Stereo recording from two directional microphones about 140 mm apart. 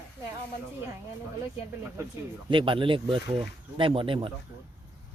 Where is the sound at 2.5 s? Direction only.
35° right (ahead or behind).